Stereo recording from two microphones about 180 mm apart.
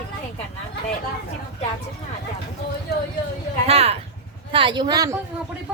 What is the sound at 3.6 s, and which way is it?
A woman's voice, 35° right (ahead or behind).